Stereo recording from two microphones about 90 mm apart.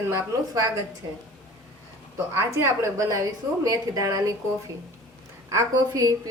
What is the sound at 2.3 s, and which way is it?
Speech, 25° right (ahead or behind).